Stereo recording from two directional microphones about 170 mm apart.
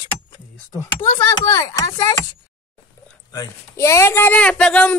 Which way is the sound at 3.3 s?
20° left (ahead or behind).